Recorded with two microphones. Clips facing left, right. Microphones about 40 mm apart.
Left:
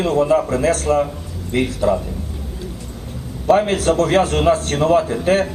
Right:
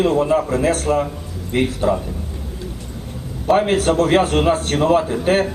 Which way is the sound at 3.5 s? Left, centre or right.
Right.